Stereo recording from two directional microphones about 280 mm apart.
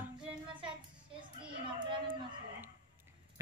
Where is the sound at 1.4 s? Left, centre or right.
Centre.